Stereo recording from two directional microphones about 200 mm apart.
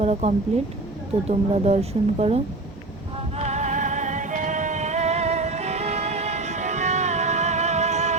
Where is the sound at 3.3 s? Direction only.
35° right (ahead or behind).